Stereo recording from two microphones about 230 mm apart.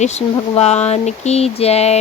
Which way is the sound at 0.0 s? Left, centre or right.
Left.